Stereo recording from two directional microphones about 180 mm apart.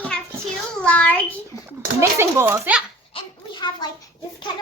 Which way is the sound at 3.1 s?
25° left (ahead or behind).